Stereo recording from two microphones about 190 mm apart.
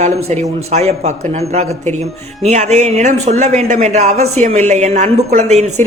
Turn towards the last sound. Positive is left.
turn(degrees=-35)  # may be behind; listen again after turning